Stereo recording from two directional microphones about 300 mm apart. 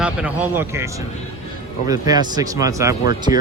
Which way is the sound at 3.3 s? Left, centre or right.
Centre.